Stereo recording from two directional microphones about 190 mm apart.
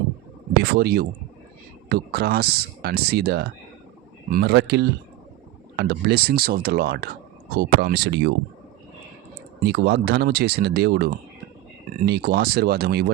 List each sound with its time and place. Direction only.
0.6 s speech: 55° right (ahead or behind)
9.6 s speech: 60° right (ahead or behind)